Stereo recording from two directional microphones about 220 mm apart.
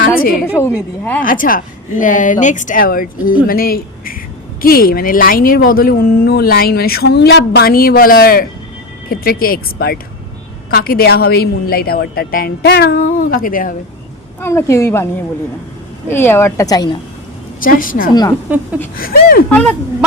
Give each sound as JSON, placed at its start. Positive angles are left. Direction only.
{"t": 0.4, "sound": "a woman's voice", "side_deg": 10}
{"t": 1.2, "sound": "a woman's voice", "side_deg": 40}
{"t": 14.4, "sound": "a woman's voice", "side_deg": 10}
{"t": 16.0, "sound": "a woman's voice", "side_deg": 10}
{"t": 17.6, "sound": "a woman's voice", "side_deg": 40}
{"t": 18.1, "sound": "a woman's voice", "side_deg": 20}
{"t": 18.9, "sound": "speech", "side_deg": 45}
{"t": 19.5, "sound": "speech", "side_deg": 5}